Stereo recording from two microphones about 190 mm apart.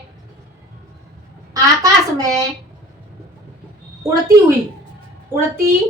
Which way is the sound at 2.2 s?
20° right (ahead or behind).